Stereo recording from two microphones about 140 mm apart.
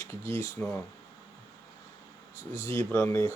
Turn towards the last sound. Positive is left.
turn(degrees=20)  # may be behind; listen again after turning